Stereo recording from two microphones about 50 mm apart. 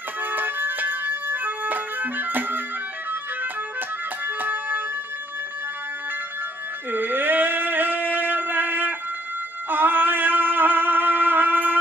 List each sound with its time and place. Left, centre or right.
0.2 s music: right
4.4 s music: right
6.9 s a sound: right
9.7 s music: right